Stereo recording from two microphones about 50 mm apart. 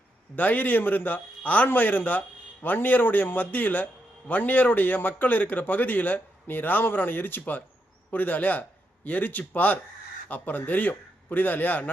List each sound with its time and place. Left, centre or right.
0.3 s a man's voice: left